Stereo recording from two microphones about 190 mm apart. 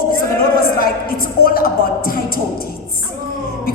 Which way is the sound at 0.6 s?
50° left (ahead or behind).